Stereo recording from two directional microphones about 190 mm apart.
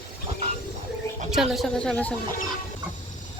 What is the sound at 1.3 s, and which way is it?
Speech, centre (ahead or behind).